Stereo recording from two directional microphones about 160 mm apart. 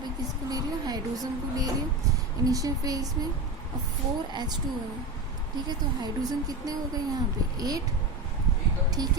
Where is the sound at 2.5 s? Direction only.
20° right (ahead or behind).